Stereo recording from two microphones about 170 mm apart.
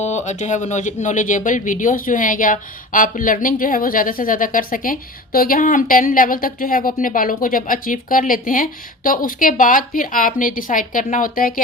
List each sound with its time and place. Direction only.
0.0 s speech: 40° left (ahead or behind)